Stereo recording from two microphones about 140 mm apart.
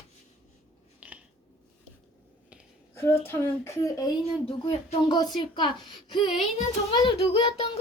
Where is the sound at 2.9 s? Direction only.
15° left (ahead or behind).